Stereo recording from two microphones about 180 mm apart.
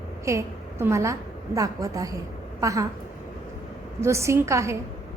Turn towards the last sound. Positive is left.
turn(degrees=-15)  # may be behind; listen again after turning